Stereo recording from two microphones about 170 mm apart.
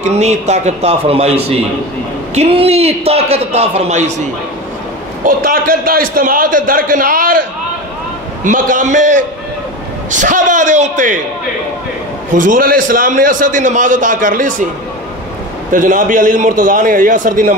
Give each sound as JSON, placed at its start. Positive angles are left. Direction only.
{"t": 0.0, "sound": "a man's voice", "side_deg": -40}
{"t": 5.2, "sound": "a man's voice", "side_deg": -55}
{"t": 8.5, "sound": "a man's voice", "side_deg": -50}
{"t": 12.4, "sound": "a man's voice", "side_deg": -55}
{"t": 15.7, "sound": "a man's voice", "side_deg": -50}